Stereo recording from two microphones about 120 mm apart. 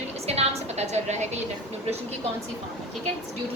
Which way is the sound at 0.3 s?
60° right (ahead or behind).